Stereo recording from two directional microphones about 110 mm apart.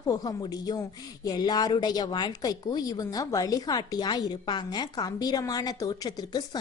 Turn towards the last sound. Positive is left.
turn(degrees=40)  # may be behind; listen again after turning